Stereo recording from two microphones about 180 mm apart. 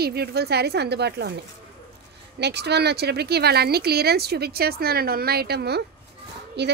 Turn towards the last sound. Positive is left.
turn(degrees=-70)  # may be behind; listen again after turning